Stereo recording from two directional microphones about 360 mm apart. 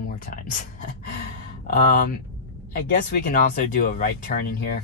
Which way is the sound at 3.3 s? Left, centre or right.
Left.